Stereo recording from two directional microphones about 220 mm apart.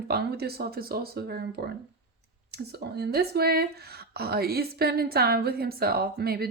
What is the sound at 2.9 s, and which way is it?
A woman's voice, 45° right (ahead or behind).